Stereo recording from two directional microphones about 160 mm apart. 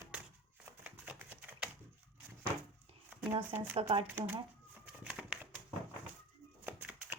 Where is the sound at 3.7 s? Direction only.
40° right (ahead or behind).